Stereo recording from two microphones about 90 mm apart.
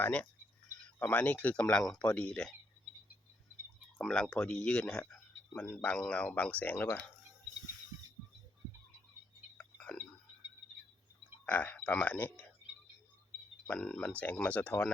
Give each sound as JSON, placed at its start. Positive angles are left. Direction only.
{"t": 0.0, "sound": "speech", "side_deg": 15}
{"t": 4.0, "sound": "speech", "side_deg": 10}
{"t": 9.6, "sound": "a sound", "side_deg": 10}
{"t": 11.4, "sound": "speech", "side_deg": 15}
{"t": 13.7, "sound": "speech", "side_deg": 10}